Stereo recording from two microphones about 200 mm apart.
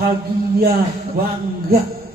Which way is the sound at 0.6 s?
50° right (ahead or behind).